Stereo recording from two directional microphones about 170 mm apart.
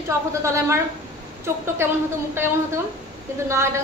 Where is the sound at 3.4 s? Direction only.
15° right (ahead or behind).